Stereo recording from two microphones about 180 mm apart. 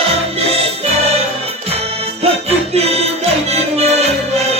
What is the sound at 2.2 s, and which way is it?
Music, 35° right (ahead or behind).